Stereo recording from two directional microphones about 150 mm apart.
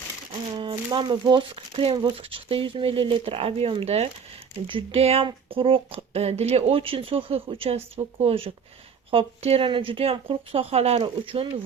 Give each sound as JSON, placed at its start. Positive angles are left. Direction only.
{"t": 0.5, "sound": "speech", "side_deg": -30}